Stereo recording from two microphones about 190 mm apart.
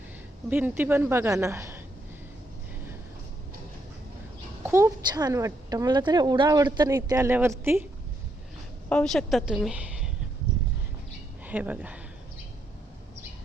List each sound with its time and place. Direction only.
0.5 s speech: 10° right (ahead or behind)
4.6 s a woman's voice: 15° right (ahead or behind)
8.9 s a woman's voice: 5° left (ahead or behind)
11.4 s speech: 10° right (ahead or behind)